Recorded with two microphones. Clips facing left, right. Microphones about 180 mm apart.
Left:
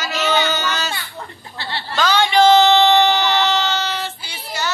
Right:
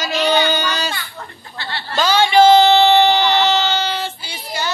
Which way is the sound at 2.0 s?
10° right (ahead or behind).